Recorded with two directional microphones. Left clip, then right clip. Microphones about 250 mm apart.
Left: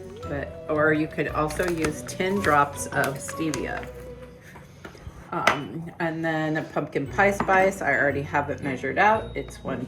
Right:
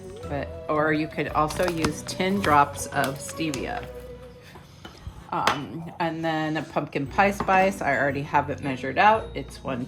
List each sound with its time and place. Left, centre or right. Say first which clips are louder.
0.3 s speech: right 1 dB; right
6.0 s speech: even; right